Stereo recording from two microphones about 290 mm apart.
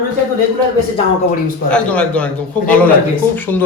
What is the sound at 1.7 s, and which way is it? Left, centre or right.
Speech, centre.